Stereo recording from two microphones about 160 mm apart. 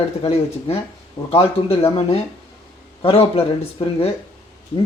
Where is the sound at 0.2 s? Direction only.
40° left (ahead or behind).